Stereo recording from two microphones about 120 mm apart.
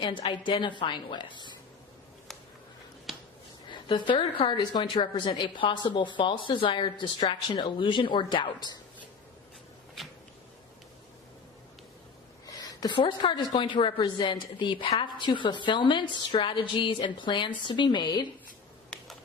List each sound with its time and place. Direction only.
0.0 s a woman's voice: 40° left (ahead or behind)
3.7 s a woman's voice: 45° left (ahead or behind)
12.5 s a woman's voice: 30° left (ahead or behind)